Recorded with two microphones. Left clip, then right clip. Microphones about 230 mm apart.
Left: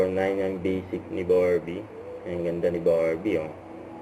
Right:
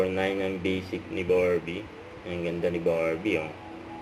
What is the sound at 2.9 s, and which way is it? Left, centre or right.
Speech, right.